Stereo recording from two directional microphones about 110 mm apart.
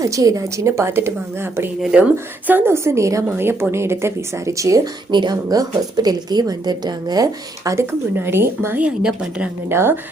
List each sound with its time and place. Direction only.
0.0 s a woman's voice: 30° right (ahead or behind)
5.1 s a woman's voice: 40° right (ahead or behind); by 10.0 s 20° right (ahead or behind)